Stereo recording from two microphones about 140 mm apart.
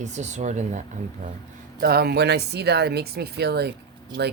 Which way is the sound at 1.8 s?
90° right.